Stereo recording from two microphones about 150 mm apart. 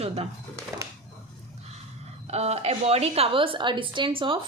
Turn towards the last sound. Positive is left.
turn(degrees=-35)  # may be behind; listen again after turning